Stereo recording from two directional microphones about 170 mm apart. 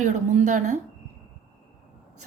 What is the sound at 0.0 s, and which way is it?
Speech, 45° right (ahead or behind).